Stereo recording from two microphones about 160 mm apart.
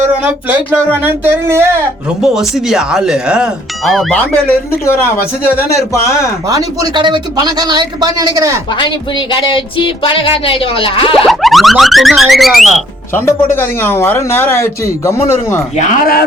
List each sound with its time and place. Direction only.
0.1 s speech: 10° right (ahead or behind)
2.2 s speech: centre (ahead or behind)
4.2 s speech: 10° left (ahead or behind)
6.5 s speech: 25° right (ahead or behind)
8.8 s speech: 30° left (ahead or behind)
11.3 s speech: centre (ahead or behind)
13.1 s speech: 15° left (ahead or behind)
15.7 s speech: 50° left (ahead or behind)